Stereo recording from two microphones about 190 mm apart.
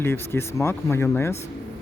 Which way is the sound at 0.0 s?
15° left (ahead or behind).